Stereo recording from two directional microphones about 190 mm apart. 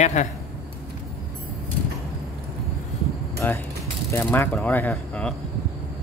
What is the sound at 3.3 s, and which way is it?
Speech, 10° left (ahead or behind).